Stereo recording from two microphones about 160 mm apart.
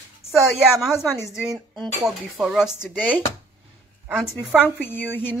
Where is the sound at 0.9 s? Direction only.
15° left (ahead or behind).